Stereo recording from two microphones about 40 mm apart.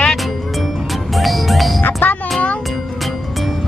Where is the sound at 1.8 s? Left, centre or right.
Left.